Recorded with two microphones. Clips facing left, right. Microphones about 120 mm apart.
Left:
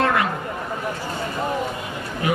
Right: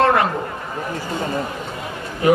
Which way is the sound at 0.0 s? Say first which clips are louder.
Right 4 dB; 35° right (ahead or behind).